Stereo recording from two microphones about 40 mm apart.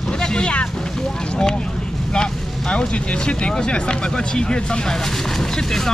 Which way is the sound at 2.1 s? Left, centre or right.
Left.